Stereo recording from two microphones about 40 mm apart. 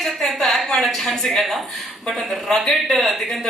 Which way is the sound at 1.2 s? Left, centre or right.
Centre.